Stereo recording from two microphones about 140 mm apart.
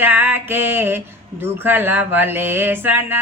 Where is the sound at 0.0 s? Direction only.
15° right (ahead or behind).